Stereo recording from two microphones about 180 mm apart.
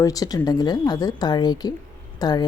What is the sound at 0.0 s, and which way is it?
Speech, 20° left (ahead or behind).